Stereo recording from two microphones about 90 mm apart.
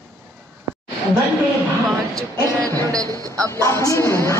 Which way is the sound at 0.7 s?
30° right (ahead or behind).